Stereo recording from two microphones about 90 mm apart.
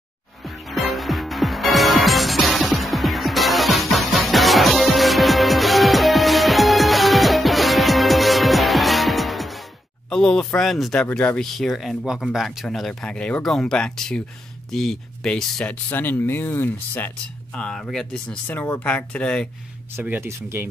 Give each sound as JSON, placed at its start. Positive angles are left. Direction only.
{"t": 0.4, "sound": "music", "side_deg": 0}
{"t": 10.0, "sound": "speech", "side_deg": 10}
{"t": 11.4, "sound": "speech", "side_deg": 5}
{"t": 15.7, "sound": "speech", "side_deg": 20}
{"t": 17.6, "sound": "speech", "side_deg": 10}
{"t": 20.0, "sound": "speech", "side_deg": -20}
{"t": 20.2, "sound": "speech", "side_deg": -30}